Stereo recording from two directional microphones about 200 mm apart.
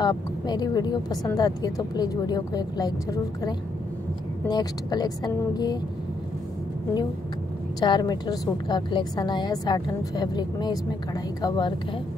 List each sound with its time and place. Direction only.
0.0 s a woman's voice: 20° left (ahead or behind)
7.8 s a woman's voice: 20° left (ahead or behind)